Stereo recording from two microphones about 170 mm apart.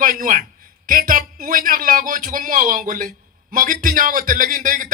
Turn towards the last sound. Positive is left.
turn(degrees=-50)  # may be behind; listen again after turning